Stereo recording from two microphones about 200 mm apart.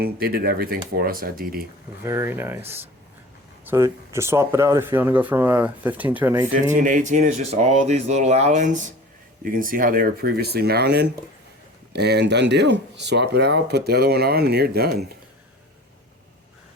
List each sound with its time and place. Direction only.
0.0 s speech: 50° right (ahead or behind)
2.0 s speech: 10° right (ahead or behind)
3.7 s speech: 15° right (ahead or behind)
6.7 s speech: 40° right (ahead or behind)